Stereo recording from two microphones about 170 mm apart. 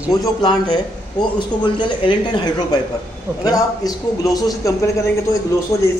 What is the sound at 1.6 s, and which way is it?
Speech, 25° left (ahead or behind).